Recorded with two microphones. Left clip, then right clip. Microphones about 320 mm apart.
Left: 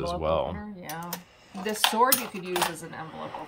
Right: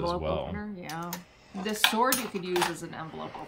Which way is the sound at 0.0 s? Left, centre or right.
Centre.